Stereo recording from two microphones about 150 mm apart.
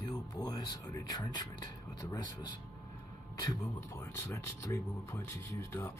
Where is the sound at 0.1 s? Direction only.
25° left (ahead or behind).